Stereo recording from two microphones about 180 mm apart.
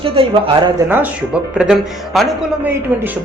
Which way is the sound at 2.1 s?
Centre (ahead or behind).